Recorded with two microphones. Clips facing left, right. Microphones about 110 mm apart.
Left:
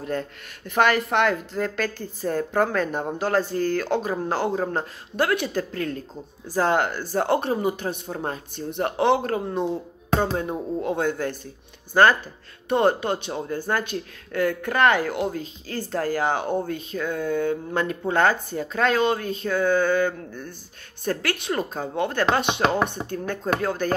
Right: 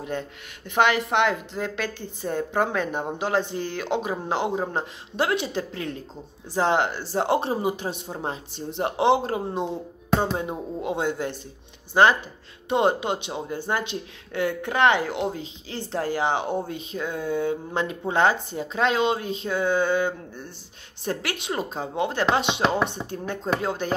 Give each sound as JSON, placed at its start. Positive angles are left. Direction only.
{"t": 0.0, "sound": "speech", "side_deg": -20}
{"t": 10.8, "sound": "speech", "side_deg": -20}